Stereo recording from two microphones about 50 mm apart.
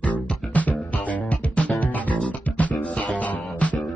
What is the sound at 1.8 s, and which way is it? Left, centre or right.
Music, left.